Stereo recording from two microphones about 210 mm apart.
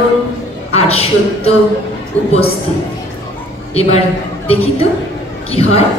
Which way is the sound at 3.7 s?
30° left (ahead or behind).